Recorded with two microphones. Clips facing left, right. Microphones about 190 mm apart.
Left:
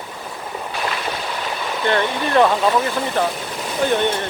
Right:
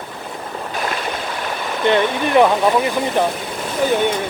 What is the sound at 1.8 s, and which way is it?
Speech, 15° right (ahead or behind).